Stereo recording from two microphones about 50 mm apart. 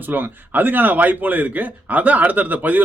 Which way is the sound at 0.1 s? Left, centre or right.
Right.